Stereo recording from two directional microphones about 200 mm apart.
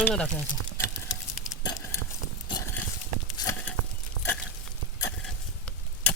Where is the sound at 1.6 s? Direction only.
15° left (ahead or behind).